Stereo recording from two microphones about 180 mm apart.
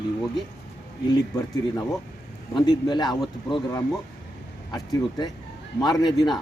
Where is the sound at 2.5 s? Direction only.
25° left (ahead or behind).